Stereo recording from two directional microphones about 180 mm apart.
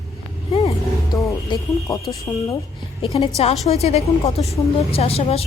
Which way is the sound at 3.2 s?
35° left (ahead or behind).